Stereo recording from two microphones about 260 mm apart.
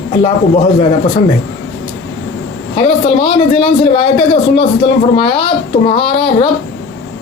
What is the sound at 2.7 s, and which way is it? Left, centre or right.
Speech, centre.